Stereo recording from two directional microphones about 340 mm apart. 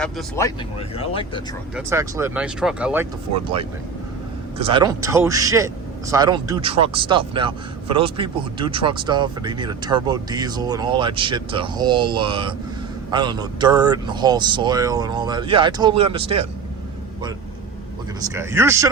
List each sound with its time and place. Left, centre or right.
0.0 s speech: centre
0.9 s speech: centre
1.7 s speech: centre
4.5 s speech: centre
18.2 s speech: centre